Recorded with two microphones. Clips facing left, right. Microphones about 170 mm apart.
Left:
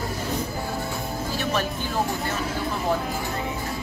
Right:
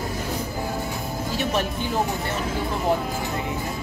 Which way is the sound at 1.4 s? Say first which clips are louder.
Right 2 dB; 20° right (ahead or behind).